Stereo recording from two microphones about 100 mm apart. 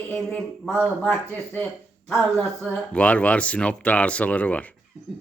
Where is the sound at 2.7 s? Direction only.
15° left (ahead or behind).